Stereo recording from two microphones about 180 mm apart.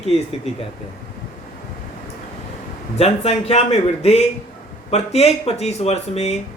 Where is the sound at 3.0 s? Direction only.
35° left (ahead or behind).